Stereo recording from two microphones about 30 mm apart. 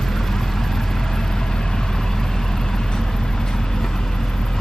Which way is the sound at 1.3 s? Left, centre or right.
Left.